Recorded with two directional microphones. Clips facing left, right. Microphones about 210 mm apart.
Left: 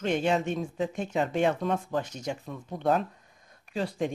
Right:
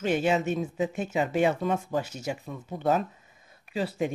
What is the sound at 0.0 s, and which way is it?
Speech, 5° right (ahead or behind).